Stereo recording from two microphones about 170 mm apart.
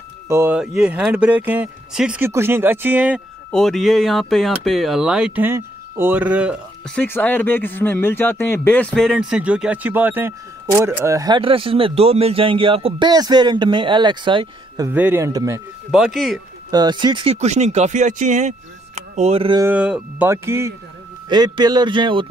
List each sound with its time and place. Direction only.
0.3 s speech: 10° right (ahead or behind)
3.5 s speech: centre (ahead or behind)
7.0 s speech: 10° left (ahead or behind); by 14.9 s 30° right (ahead or behind)
14.9 s speech: 10° right (ahead or behind)
15.9 s speech: centre (ahead or behind)
16.7 s speech: 25° right (ahead or behind)
19.6 s speech: 10° right (ahead or behind); by 22.3 s 30° right (ahead or behind)